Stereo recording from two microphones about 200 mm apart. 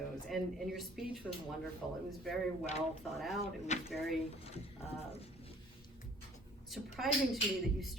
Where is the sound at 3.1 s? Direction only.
Centre (ahead or behind).